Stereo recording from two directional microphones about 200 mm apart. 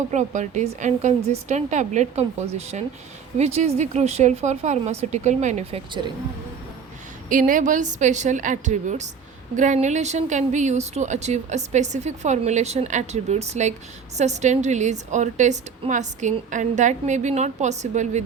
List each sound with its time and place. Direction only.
0.1 s a woman's voice: 35° right (ahead or behind)
7.3 s a woman's voice: 40° right (ahead or behind)